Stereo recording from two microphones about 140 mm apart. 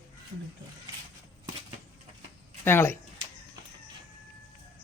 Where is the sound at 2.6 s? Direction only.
15° left (ahead or behind).